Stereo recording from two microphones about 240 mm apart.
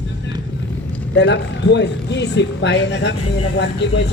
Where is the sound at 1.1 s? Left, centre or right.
Left.